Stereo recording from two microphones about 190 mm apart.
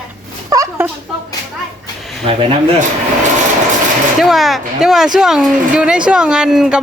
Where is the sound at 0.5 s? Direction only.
15° right (ahead or behind).